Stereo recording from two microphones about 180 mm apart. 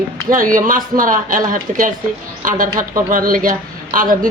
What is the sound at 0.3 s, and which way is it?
Speech, 50° right (ahead or behind).